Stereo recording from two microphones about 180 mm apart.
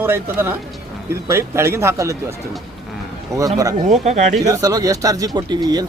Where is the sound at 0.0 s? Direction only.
10° right (ahead or behind).